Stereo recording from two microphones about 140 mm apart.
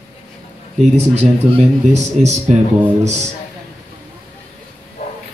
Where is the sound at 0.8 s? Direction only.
50° right (ahead or behind).